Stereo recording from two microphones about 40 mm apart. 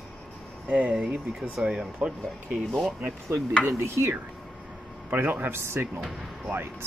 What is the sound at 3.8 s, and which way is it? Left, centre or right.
Speech, right.